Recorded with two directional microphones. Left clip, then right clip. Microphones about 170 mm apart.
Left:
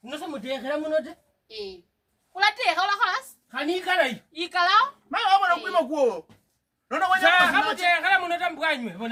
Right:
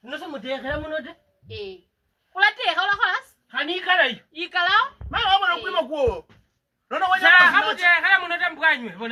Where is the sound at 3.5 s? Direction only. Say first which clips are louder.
Right 4 dB; 60° left (ahead or behind).